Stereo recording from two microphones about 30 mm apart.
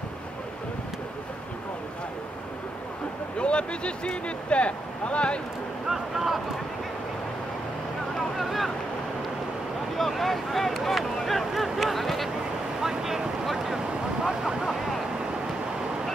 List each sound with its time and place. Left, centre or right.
3.3 s speech: left
5.9 s speech: centre
8.4 s boat: centre
9.9 s a sound: centre
12.8 s vehicle: centre
13.7 s a sound: centre